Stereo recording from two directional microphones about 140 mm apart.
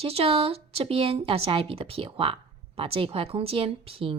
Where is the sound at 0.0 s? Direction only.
45° right (ahead or behind).